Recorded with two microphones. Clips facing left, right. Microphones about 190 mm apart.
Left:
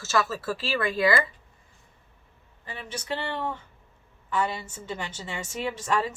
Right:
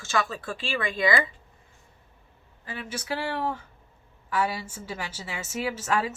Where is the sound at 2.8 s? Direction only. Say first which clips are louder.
Right 1 dB; 5° right (ahead or behind).